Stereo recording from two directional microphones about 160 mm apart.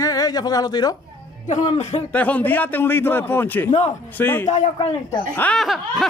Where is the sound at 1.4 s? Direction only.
40° left (ahead or behind).